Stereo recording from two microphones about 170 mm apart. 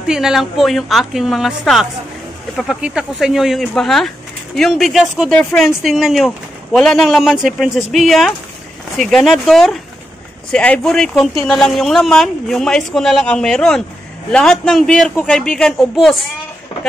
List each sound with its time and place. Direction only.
0.0 s a man's voice: 5° right (ahead or behind)